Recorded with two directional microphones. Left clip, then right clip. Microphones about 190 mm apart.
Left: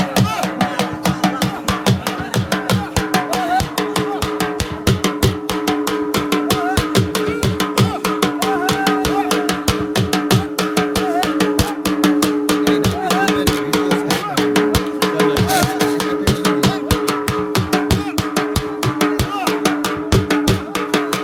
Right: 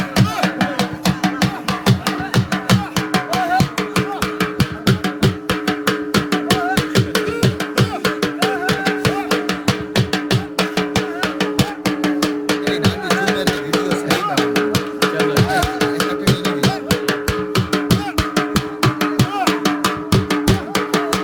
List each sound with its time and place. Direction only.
0.2 s music: 25° left (ahead or behind)
5.6 s music: 40° left (ahead or behind)
13.7 s music: 35° left (ahead or behind)
20.1 s music: centre (ahead or behind)